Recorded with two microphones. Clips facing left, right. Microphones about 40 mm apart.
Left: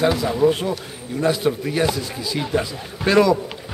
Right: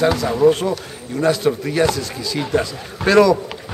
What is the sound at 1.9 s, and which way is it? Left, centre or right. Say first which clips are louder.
Speech: right 2 dB; centre.